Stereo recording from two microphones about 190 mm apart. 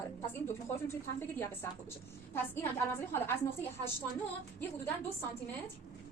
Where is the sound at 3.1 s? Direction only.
10° left (ahead or behind).